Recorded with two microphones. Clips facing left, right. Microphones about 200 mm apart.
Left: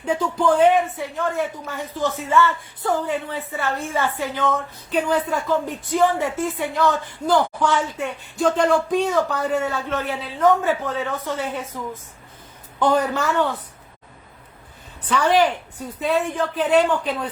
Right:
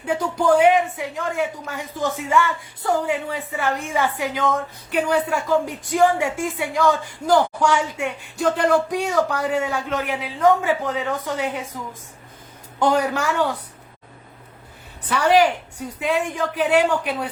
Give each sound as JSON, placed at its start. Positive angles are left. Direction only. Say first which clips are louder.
{"t": 0.0, "sound": "a woman's voice", "louder": "even", "side_deg": -10}
{"t": 12.8, "sound": "a woman's voice", "louder": "even", "side_deg": -10}
{"t": 15.1, "sound": "a woman's voice", "louder": "right 1 dB", "side_deg": -10}